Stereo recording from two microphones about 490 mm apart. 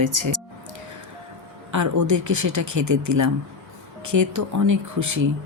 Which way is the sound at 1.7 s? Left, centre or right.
Right.